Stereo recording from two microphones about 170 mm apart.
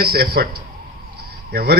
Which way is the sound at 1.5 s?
70° right (ahead or behind).